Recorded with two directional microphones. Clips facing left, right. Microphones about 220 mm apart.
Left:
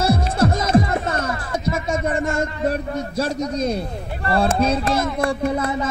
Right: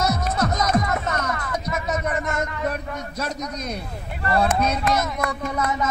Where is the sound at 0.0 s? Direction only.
30° left (ahead or behind).